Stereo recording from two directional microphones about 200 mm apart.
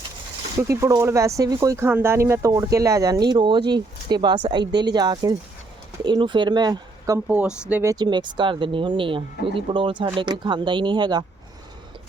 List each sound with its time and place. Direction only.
0.7 s speech: 15° right (ahead or behind)
7.3 s speech: 5° right (ahead or behind); by 11.3 s 20° right (ahead or behind)